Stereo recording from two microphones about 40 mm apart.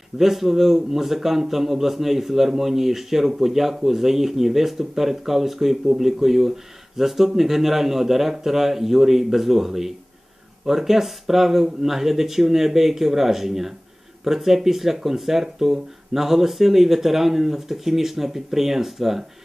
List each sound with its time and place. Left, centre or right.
0.2 s a man's voice: centre